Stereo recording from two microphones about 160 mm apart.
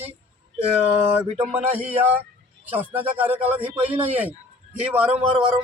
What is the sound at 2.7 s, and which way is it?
Speech, 10° right (ahead or behind).